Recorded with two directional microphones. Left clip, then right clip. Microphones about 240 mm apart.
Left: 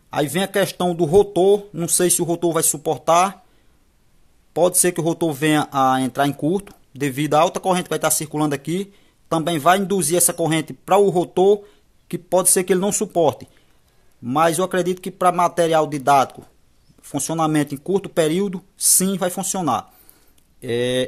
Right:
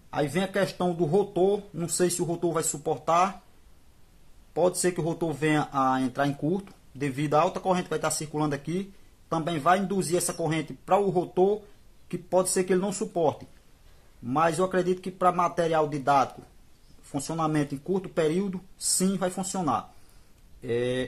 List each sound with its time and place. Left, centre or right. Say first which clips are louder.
0.1 s speech: left 7 dB; left
4.6 s speech: left 7 dB; left